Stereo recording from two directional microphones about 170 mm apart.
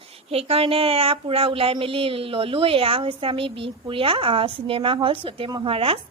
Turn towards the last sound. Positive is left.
turn(degrees=-35)  # may be behind; listen again after turning